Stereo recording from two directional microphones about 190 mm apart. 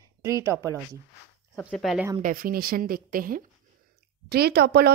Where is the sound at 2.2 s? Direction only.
50° right (ahead or behind).